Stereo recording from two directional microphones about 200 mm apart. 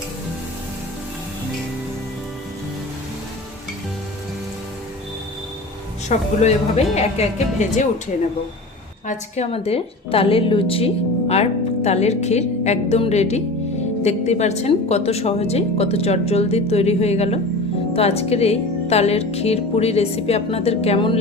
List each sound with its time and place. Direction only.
6.1 s speech: 35° left (ahead or behind)
9.0 s speech: 35° left (ahead or behind)